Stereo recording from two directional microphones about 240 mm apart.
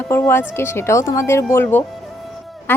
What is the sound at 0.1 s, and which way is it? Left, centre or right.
Speech, centre.